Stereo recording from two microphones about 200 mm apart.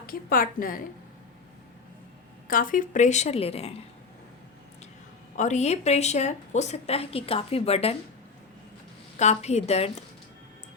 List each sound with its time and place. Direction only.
0.0 s a woman's voice: 45° left (ahead or behind)
2.5 s a woman's voice: 45° left (ahead or behind)
5.4 s a woman's voice: 35° left (ahead or behind)
9.1 s a woman's voice: 35° left (ahead or behind)